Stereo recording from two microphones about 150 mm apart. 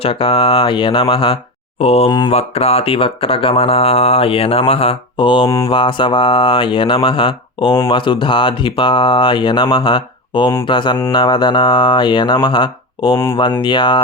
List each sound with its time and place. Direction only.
0.0 s speech: 40° left (ahead or behind)
2.0 s mantra: 25° left (ahead or behind)
2.3 s speech: 40° left (ahead or behind)